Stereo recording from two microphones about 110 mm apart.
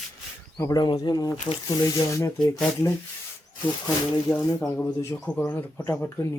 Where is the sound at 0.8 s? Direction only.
40° left (ahead or behind).